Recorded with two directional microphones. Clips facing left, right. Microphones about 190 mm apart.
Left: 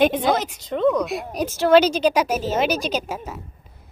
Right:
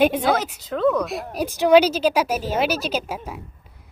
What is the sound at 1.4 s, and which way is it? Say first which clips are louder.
Speech: even; 15° right (ahead or behind).